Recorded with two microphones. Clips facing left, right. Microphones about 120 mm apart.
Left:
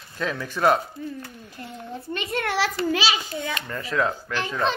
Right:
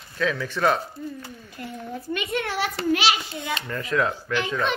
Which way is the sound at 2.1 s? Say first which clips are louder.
Right 1 dB; 35° left (ahead or behind).